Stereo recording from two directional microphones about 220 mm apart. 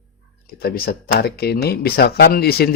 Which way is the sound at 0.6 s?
45° left (ahead or behind).